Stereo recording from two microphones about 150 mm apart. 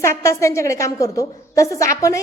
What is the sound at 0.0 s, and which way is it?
A woman's voice, 20° left (ahead or behind).